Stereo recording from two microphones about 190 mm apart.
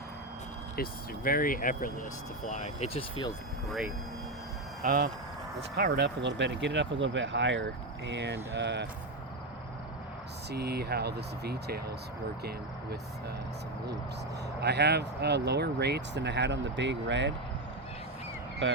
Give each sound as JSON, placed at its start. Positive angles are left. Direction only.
{"t": 0.8, "sound": "speech", "side_deg": 50}
{"t": 4.8, "sound": "speech", "side_deg": -45}
{"t": 5.7, "sound": "speech", "side_deg": -55}
{"t": 10.5, "sound": "speech", "side_deg": -55}
{"t": 14.6, "sound": "speech", "side_deg": -60}
{"t": 18.6, "sound": "speech", "side_deg": -80}